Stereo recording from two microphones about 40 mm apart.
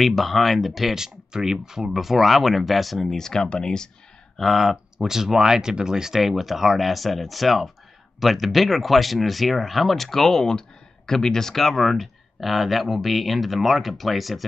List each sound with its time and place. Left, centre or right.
0.0 s speech: centre
4.4 s speech: centre